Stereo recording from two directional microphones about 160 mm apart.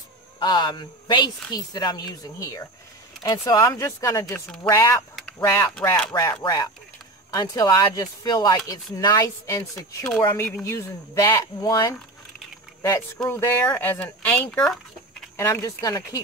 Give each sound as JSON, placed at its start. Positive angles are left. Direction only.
{"t": 0.4, "sound": "a woman's voice", "side_deg": 25}
{"t": 6.4, "sound": "a woman's voice", "side_deg": 25}
{"t": 13.3, "sound": "speech", "side_deg": 15}
{"t": 15.3, "sound": "a woman's voice", "side_deg": 20}